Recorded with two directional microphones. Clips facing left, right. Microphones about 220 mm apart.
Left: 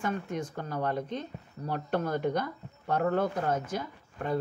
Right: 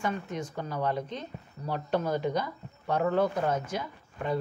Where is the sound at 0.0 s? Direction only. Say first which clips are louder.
Even; 50° left (ahead or behind).